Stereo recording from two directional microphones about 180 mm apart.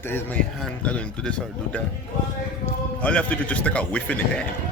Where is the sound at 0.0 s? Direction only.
10° left (ahead or behind).